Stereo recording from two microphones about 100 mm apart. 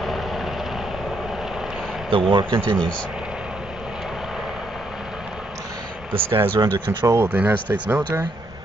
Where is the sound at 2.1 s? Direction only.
60° right (ahead or behind).